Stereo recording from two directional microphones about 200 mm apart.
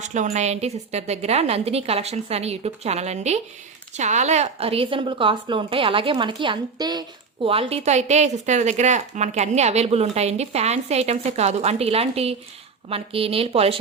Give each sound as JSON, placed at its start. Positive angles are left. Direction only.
{"t": 0.0, "sound": "a woman's voice", "side_deg": -35}